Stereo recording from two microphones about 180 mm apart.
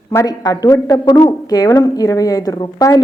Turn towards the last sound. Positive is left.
turn(degrees=20)  # may be behind; listen again after turning